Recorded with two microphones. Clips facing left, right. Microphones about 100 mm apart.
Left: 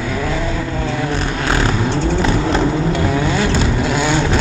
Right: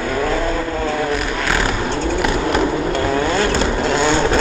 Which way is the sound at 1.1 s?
25° left (ahead or behind).